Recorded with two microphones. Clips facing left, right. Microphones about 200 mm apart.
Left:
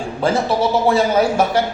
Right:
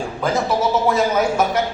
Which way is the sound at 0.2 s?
30° left (ahead or behind).